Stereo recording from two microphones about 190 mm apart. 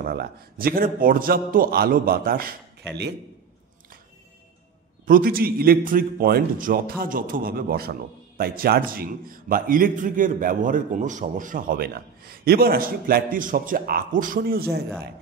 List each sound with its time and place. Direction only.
0.0 s a man's voice: 55° right (ahead or behind)
5.0 s a man's voice: 50° right (ahead or behind)